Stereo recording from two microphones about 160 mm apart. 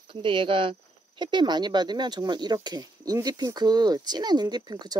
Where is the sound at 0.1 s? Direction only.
30° right (ahead or behind).